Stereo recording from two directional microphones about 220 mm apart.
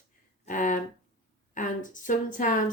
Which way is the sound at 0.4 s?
35° left (ahead or behind).